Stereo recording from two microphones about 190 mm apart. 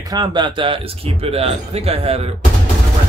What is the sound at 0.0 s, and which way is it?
Speech, 20° right (ahead or behind).